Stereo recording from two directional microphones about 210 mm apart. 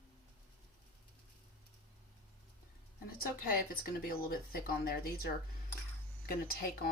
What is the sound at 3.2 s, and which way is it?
Speech, 45° left (ahead or behind).